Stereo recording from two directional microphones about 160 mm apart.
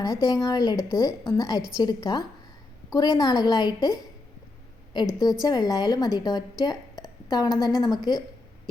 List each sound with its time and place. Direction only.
0.0 s a woman's voice: 20° left (ahead or behind)
5.2 s a woman's voice: 25° left (ahead or behind)